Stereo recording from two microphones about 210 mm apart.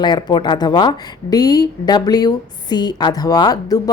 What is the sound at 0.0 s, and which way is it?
A woman's voice, 20° left (ahead or behind).